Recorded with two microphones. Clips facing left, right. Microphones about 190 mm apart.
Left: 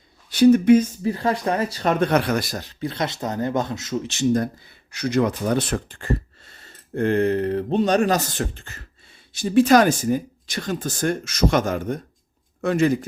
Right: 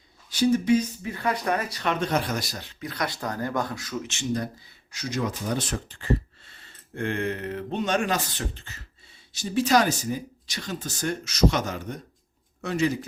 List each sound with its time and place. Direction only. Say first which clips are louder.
0.3 s speech: left 8 dB; 60° left (ahead or behind)
1.0 s speech: left 5 dB; 35° left (ahead or behind)
1.9 s speech: left 6 dB; 60° left (ahead or behind)
2.8 s speech: left 4 dB; 25° left (ahead or behind); by 4.4 s 45° left (ahead or behind)
4.9 s speech: left 8 dB; 60° left (ahead or behind)